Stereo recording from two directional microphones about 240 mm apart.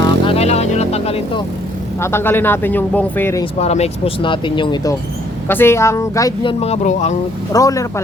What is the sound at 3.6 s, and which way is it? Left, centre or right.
Speech, left.